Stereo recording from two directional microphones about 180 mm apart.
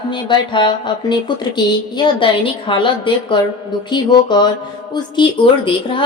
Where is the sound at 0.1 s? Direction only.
25° left (ahead or behind).